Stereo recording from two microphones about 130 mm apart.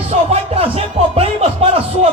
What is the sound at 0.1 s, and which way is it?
Music, 50° right (ahead or behind).